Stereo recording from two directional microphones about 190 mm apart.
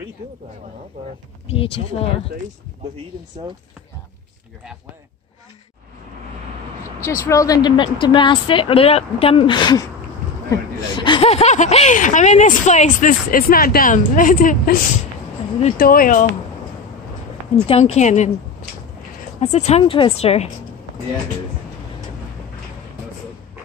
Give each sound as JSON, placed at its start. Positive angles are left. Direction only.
{"t": 1.5, "sound": "speech", "side_deg": 30}
{"t": 7.0, "sound": "a woman's voice", "side_deg": 15}
{"t": 15.8, "sound": "speech", "side_deg": 50}
{"t": 17.9, "sound": "speech", "side_deg": 40}
{"t": 19.4, "sound": "speech", "side_deg": 35}